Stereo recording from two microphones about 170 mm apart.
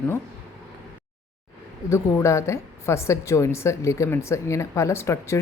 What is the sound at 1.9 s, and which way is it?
A woman's voice, 15° left (ahead or behind).